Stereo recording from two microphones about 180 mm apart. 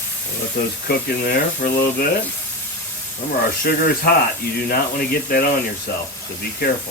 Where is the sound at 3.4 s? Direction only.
55° left (ahead or behind).